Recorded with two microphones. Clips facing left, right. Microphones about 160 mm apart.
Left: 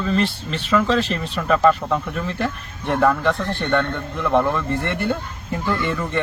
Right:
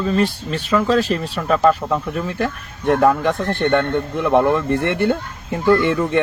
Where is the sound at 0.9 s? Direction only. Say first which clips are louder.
Right 4 dB; 40° right (ahead or behind).